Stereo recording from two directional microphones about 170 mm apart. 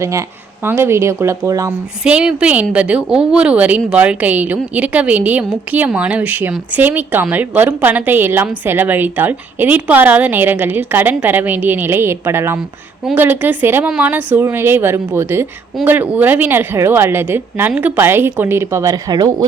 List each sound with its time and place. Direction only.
0.0 s speech: 15° right (ahead or behind)
2.0 s speech: 5° right (ahead or behind); by 19.5 s 25° right (ahead or behind)